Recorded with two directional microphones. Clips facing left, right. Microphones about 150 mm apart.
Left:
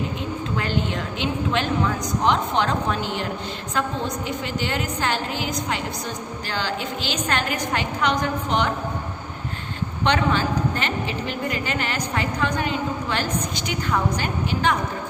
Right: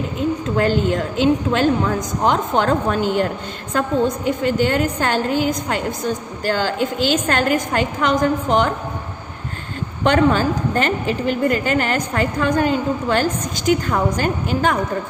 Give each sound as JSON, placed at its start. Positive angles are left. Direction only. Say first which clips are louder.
{"t": 0.5, "sound": "a woman's voice", "louder": "right 7 dB", "side_deg": -45}
{"t": 10.0, "sound": "a woman's voice", "louder": "right 6 dB", "side_deg": -45}